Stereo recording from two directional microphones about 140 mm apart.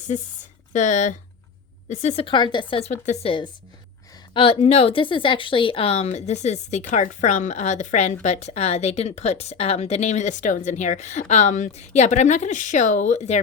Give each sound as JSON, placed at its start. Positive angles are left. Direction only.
{"t": 0.7, "sound": "a woman's voice", "side_deg": 60}
{"t": 2.2, "sound": "a woman's voice", "side_deg": 35}
{"t": 3.2, "sound": "a woman's voice", "side_deg": 35}